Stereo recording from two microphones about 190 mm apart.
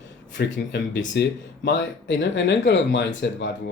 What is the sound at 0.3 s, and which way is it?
Speech, 70° left (ahead or behind).